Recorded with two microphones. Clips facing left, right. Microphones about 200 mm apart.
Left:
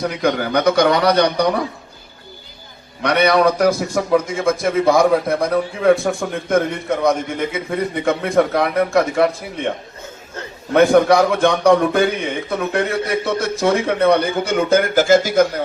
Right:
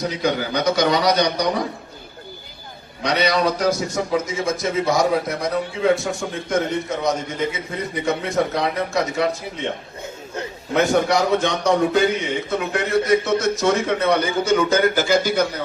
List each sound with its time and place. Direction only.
0.0 s a man's voice: 55° left (ahead or behind)
3.0 s a man's voice: 60° left (ahead or behind)
10.8 s a man's voice: 55° left (ahead or behind)